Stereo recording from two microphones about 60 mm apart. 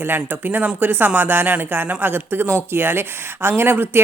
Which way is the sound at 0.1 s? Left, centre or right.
Right.